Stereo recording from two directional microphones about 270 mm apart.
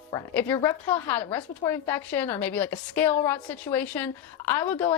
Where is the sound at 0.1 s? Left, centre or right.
Centre.